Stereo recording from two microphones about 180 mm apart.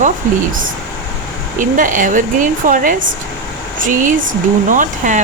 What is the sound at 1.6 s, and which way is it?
Speech, 45° right (ahead or behind).